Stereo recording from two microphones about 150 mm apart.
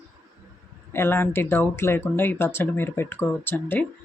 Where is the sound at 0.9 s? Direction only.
15° left (ahead or behind).